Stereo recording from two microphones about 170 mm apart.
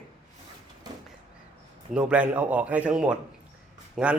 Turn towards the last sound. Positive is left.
turn(degrees=0)  # may be behind; listen again after turning